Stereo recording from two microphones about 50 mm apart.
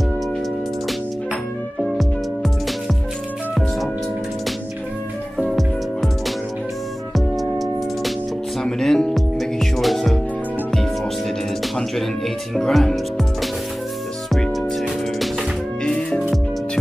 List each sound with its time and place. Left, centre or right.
5.5 s music: centre
7.2 s music: centre
12.5 s music: centre
14.8 s music: centre
15.8 s music: centre